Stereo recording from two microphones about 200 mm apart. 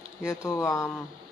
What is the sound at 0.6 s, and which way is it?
Speech, 5° left (ahead or behind).